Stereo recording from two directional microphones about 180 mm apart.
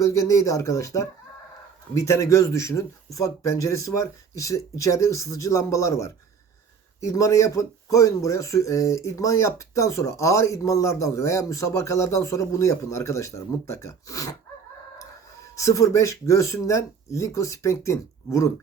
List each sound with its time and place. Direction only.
0.0 s speech: 15° left (ahead or behind)
2.0 s speech: 15° left (ahead or behind)
15.5 s speech: 15° left (ahead or behind)